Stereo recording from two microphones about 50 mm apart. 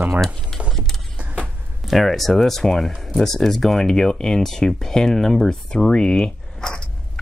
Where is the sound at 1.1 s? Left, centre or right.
Right.